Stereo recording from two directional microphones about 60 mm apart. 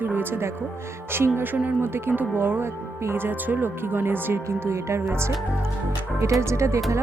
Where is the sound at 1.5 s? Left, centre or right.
Right.